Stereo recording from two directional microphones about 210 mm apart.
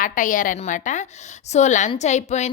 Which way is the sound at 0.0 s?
40° left (ahead or behind).